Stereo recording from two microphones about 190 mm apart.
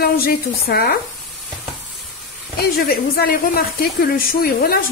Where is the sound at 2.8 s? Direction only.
50° left (ahead or behind).